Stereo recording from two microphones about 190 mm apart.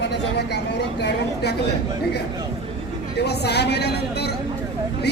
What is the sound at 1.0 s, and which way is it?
Speech, 60° left (ahead or behind).